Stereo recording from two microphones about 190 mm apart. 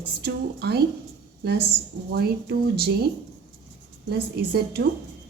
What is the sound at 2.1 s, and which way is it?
Speech, 55° right (ahead or behind).